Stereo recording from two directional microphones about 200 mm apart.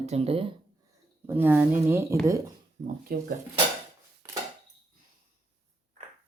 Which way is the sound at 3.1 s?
50° right (ahead or behind).